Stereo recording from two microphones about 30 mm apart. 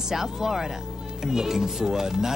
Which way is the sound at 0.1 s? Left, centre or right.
Centre.